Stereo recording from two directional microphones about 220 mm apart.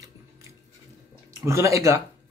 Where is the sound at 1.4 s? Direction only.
15° right (ahead or behind).